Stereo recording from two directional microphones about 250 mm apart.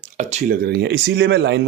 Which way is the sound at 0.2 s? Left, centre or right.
Right.